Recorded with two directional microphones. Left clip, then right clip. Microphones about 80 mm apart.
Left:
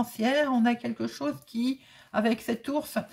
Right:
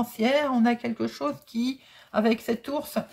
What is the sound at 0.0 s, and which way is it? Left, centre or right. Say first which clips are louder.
Speech: right 2 dB; right.